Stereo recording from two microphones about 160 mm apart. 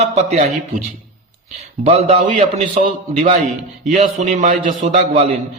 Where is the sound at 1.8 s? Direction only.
40° right (ahead or behind).